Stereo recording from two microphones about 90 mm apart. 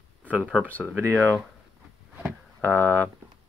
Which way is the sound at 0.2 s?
15° right (ahead or behind).